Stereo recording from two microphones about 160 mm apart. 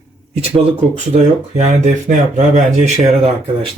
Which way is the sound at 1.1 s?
45° right (ahead or behind).